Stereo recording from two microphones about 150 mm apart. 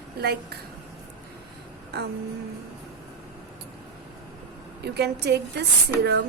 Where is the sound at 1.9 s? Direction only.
90° right.